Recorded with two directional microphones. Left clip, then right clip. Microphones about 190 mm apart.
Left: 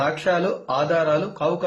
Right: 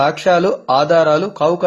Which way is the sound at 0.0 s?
30° right (ahead or behind).